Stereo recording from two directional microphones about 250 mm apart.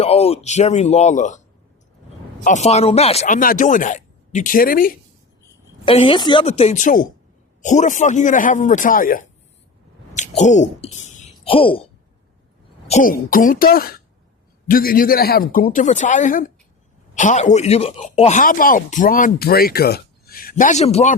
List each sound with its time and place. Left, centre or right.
0.0 s a man's voice: left
2.4 s speech: left
5.8 s a man's voice: left
12.9 s speech: left